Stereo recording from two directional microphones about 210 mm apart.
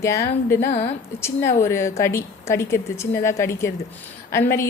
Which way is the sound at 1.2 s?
10° left (ahead or behind).